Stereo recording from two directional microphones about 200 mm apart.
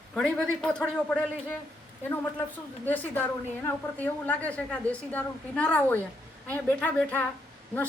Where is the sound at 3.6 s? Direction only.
10° left (ahead or behind).